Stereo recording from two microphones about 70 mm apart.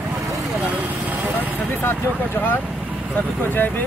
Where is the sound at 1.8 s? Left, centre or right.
Left.